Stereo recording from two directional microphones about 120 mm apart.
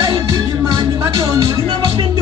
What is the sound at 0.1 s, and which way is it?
Music, 25° right (ahead or behind).